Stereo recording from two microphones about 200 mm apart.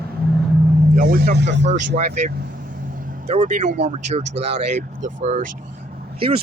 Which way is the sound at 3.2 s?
35° right (ahead or behind).